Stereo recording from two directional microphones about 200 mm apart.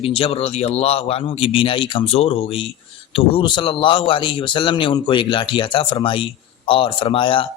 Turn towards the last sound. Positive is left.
turn(degrees=25)  # may be behind; listen again after turning